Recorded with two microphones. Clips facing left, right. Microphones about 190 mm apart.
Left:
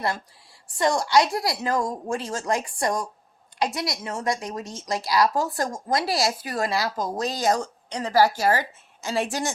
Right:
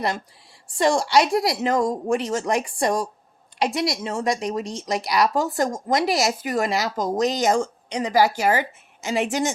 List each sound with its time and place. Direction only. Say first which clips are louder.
0.8 s speech: right 2 dB; 25° right (ahead or behind)